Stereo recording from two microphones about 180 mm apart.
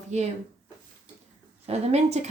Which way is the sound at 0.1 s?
40° right (ahead or behind).